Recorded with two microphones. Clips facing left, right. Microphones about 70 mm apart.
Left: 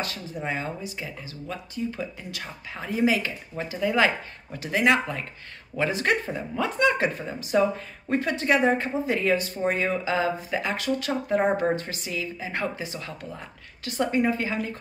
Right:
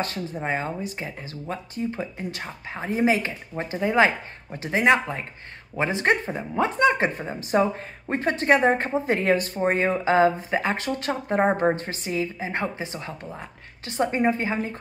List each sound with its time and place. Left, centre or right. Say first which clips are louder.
0.0 s speech: right 3 dB; right